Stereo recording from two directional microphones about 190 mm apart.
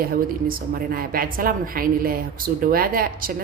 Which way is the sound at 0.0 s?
50° right (ahead or behind).